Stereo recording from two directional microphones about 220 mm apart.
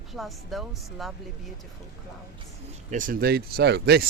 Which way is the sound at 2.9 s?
40° right (ahead or behind).